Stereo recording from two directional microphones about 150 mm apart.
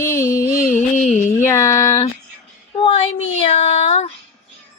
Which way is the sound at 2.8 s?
40° left (ahead or behind).